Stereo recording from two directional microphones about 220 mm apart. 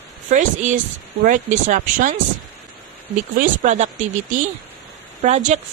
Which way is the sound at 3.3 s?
35° right (ahead or behind).